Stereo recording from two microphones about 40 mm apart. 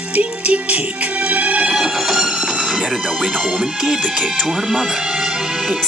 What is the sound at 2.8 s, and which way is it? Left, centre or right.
Speech, centre.